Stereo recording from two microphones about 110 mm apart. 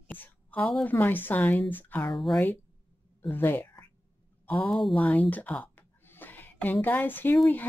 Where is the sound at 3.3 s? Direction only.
20° left (ahead or behind).